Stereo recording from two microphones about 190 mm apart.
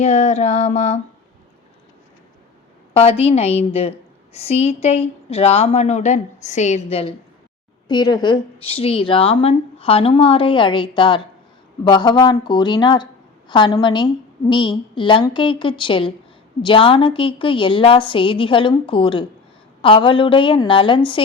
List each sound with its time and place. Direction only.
0.0 s a woman's voice: 35° left (ahead or behind)
2.9 s a woman's voice: 30° left (ahead or behind)
7.9 s a woman's voice: 25° left (ahead or behind)